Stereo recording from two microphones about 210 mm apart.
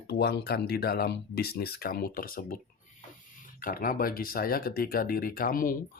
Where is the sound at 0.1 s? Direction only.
50° left (ahead or behind).